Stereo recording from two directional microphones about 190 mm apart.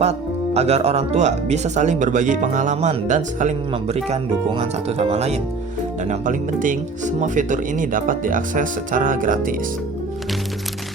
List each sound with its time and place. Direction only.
0.0 s speech: 35° right (ahead or behind)